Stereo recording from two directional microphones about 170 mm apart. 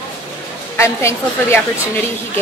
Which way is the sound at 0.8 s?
15° left (ahead or behind).